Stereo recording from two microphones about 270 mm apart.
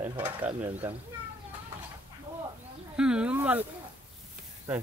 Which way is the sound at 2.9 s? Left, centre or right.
Centre.